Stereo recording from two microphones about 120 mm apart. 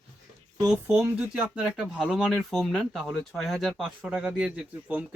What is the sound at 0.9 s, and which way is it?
Speech, 20° right (ahead or behind).